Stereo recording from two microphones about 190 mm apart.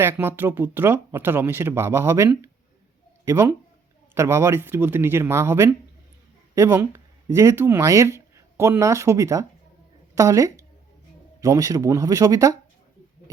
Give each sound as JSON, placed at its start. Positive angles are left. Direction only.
{"t": 0.0, "sound": "speech", "side_deg": -10}